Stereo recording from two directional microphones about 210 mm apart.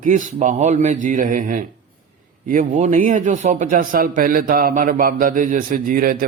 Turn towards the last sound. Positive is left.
turn(degrees=-40)  # may be behind; listen again after turning